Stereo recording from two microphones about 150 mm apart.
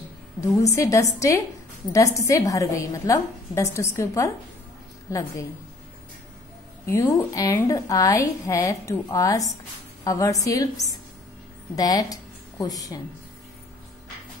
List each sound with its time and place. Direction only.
0.6 s a woman's voice: 20° left (ahead or behind)
6.9 s a woman's voice: 20° left (ahead or behind)